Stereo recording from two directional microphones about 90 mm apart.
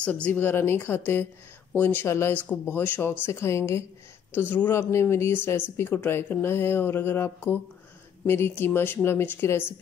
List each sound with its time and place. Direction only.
0.0 s speech: 15° left (ahead or behind)